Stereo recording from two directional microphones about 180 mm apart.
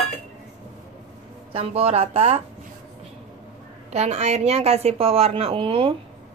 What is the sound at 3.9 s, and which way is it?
A woman's voice, 35° right (ahead or behind).